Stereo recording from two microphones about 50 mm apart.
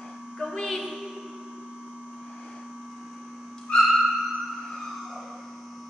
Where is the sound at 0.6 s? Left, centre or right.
Centre.